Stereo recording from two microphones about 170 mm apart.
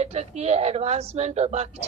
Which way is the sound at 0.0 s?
40° right (ahead or behind).